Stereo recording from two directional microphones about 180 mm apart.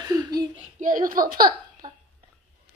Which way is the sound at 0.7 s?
45° right (ahead or behind).